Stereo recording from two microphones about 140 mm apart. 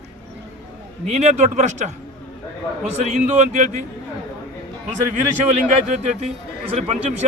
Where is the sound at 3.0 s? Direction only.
55° right (ahead or behind).